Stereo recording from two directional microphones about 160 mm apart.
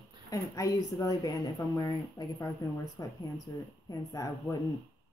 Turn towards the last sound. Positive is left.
turn(degrees=20)  # may be behind; listen again after turning